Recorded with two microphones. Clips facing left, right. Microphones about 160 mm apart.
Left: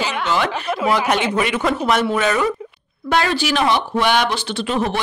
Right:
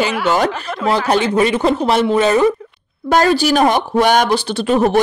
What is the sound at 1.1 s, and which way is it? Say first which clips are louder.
A woman's voice: right 5 dB; 35° right (ahead or behind).